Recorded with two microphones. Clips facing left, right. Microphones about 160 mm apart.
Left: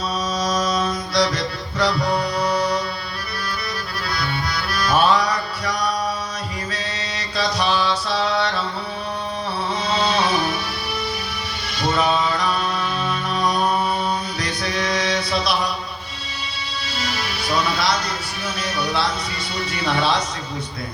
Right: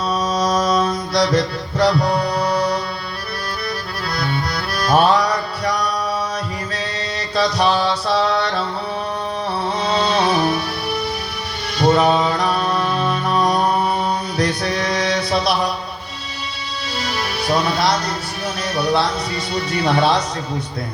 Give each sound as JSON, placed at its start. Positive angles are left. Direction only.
{"t": 0.1, "sound": "mantra", "side_deg": -60}
{"t": 2.0, "sound": "music", "side_deg": -35}
{"t": 4.1, "sound": "music", "side_deg": -55}
{"t": 7.3, "sound": "music", "side_deg": -55}
{"t": 9.8, "sound": "music", "side_deg": -60}
{"t": 11.8, "sound": "music", "side_deg": -60}
{"t": 14.3, "sound": "mantra", "side_deg": -60}
{"t": 15.0, "sound": "chant", "side_deg": -60}
{"t": 17.0, "sound": "music", "side_deg": -60}
{"t": 19.5, "sound": "speech", "side_deg": -60}